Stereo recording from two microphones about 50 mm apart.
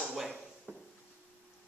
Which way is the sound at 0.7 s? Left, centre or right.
Right.